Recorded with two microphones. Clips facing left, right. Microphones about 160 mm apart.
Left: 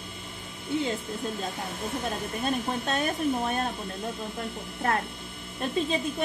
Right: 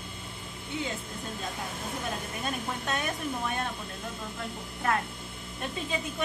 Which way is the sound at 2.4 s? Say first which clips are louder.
Left 8 dB; 35° left (ahead or behind).